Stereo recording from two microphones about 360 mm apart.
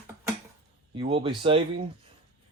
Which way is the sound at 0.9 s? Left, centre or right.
Centre.